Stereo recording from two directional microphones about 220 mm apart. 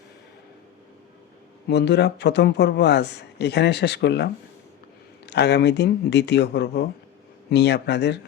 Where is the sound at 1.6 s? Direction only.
50° left (ahead or behind).